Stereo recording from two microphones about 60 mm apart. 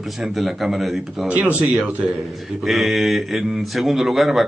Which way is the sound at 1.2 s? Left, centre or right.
Right.